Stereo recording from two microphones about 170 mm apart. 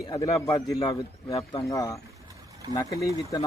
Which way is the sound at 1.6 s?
20° left (ahead or behind).